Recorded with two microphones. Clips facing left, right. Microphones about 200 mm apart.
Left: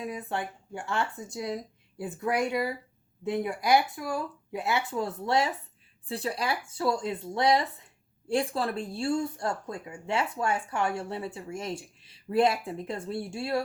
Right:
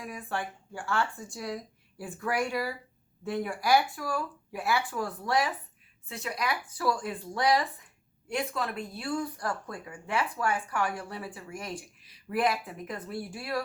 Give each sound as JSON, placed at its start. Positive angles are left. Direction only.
{"t": 0.0, "sound": "speech", "side_deg": 20}